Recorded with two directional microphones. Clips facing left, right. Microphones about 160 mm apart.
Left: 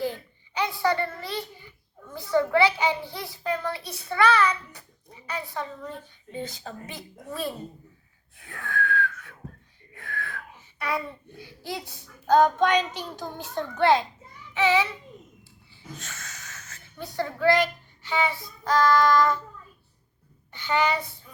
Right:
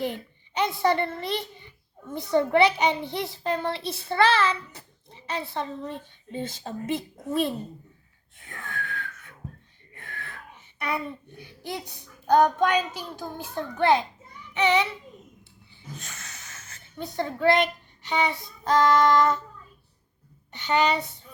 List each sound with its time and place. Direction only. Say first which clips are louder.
0.0 s a child's voice: even; 20° right (ahead or behind)
8.5 s whistling: left 8 dB; 20° right (ahead or behind)
10.0 s wheeze: left 5 dB; 20° right (ahead or behind)
11.3 s a child's voice: left 2 dB; 20° right (ahead or behind)
17.0 s a child's voice: right 1 dB; 20° right (ahead or behind)
20.6 s a child's voice: right 2 dB; 20° right (ahead or behind)